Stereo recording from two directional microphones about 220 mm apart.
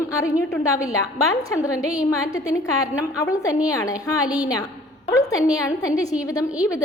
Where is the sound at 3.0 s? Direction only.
15° left (ahead or behind).